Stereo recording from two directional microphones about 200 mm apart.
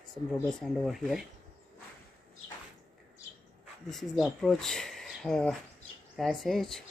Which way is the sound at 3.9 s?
Centre (ahead or behind).